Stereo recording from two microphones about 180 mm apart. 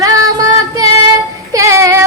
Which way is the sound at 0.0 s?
20° right (ahead or behind).